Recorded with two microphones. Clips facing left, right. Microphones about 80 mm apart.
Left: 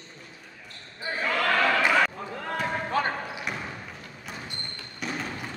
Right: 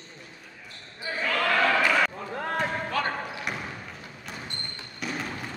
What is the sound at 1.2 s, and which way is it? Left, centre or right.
Basketball bounce, centre.